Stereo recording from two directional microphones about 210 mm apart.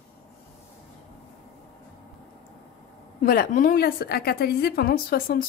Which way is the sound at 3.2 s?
40° left (ahead or behind).